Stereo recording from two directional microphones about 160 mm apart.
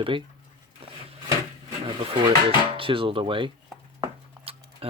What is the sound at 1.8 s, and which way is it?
Speech, 35° right (ahead or behind).